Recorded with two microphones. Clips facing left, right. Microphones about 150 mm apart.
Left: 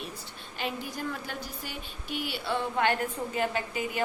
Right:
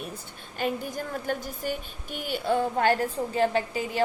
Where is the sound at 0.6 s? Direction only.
45° right (ahead or behind).